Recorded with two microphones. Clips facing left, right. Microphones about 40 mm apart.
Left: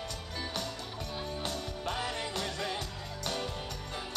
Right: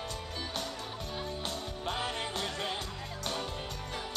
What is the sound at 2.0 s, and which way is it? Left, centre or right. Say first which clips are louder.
Music: right 1 dB; right.